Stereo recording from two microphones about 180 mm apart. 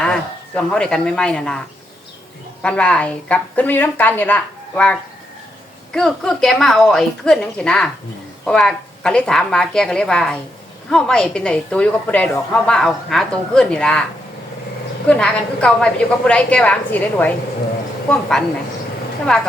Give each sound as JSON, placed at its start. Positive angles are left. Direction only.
{"t": 0.0, "sound": "a woman's voice", "side_deg": 5}
{"t": 15.0, "sound": "speech", "side_deg": 5}
{"t": 19.3, "sound": "a woman's voice", "side_deg": 0}